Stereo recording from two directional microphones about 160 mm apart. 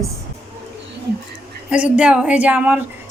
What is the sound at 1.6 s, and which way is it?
Speech, 10° right (ahead or behind).